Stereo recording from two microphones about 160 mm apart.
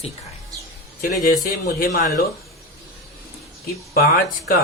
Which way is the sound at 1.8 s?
60° left (ahead or behind).